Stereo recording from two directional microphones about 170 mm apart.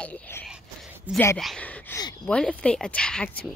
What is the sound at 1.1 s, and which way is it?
Speech, 15° left (ahead or behind).